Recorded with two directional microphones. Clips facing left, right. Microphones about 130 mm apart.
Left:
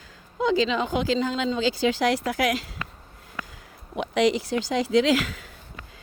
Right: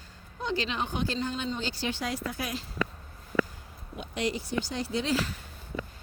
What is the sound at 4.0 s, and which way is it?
Speech, 90° left.